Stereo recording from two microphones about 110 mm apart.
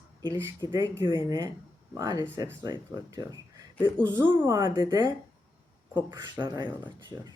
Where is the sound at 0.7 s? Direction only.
40° right (ahead or behind).